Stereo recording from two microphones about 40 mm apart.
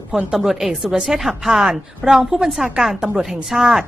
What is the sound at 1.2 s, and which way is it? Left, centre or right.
Speech, centre.